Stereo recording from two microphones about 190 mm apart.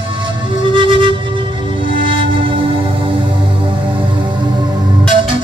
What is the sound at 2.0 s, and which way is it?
Music, 25° right (ahead or behind).